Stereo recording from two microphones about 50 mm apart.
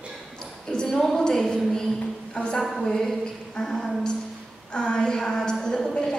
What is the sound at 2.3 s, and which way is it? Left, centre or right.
Speech, centre.